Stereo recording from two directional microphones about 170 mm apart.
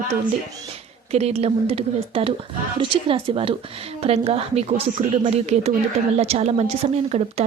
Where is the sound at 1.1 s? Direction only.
40° right (ahead or behind).